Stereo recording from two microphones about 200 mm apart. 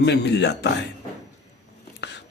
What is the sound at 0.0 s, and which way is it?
Speech, 60° left (ahead or behind).